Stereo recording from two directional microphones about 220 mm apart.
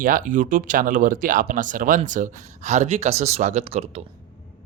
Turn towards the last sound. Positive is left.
turn(degrees=-25)  # may be behind; listen again after turning